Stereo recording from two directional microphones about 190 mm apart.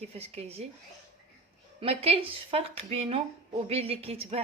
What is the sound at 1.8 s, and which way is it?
A woman's voice, 30° right (ahead or behind).